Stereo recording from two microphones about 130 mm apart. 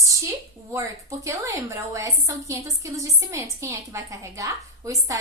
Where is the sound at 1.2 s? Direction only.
25° right (ahead or behind).